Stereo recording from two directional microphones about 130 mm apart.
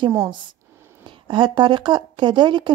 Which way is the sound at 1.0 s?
40° right (ahead or behind).